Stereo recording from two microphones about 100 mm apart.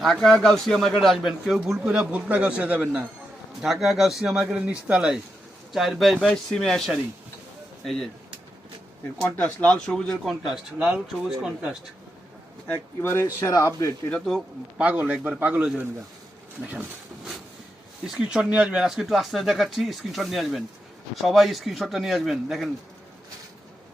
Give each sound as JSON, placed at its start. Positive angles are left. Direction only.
{"t": 0.0, "sound": "a man's voice", "side_deg": 0}
{"t": 3.6, "sound": "speech", "side_deg": 0}
{"t": 9.2, "sound": "speech", "side_deg": 10}
{"t": 12.6, "sound": "speech", "side_deg": 20}
{"t": 14.1, "sound": "speech", "side_deg": 0}
{"t": 14.8, "sound": "a man's voice", "side_deg": -15}
{"t": 18.0, "sound": "a man's voice", "side_deg": -5}